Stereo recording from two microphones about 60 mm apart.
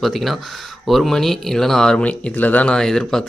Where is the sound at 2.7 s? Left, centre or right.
Centre.